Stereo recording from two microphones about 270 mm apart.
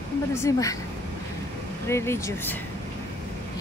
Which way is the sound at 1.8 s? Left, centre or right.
Centre.